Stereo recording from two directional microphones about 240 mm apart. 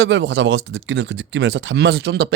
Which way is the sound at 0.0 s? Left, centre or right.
Right.